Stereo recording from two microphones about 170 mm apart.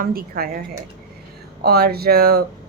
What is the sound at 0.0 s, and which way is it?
Speech, 60° right (ahead or behind).